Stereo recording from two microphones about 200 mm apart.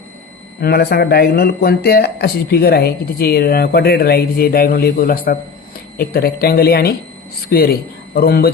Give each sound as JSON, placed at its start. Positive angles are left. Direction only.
{"t": 0.6, "sound": "a man's voice", "side_deg": 50}